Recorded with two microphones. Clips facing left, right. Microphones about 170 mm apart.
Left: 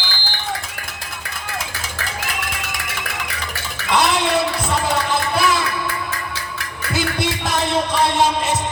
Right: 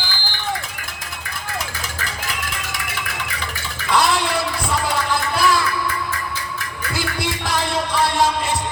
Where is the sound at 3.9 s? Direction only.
20° left (ahead or behind).